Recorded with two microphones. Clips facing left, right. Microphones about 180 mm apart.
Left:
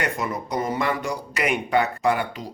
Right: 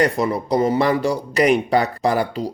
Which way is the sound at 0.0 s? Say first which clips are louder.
Right 8 dB; 35° right (ahead or behind).